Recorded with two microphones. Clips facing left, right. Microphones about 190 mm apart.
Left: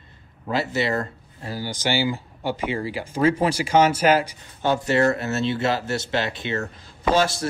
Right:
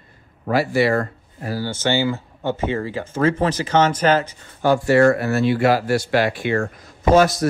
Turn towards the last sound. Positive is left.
turn(degrees=30)  # may be behind; listen again after turning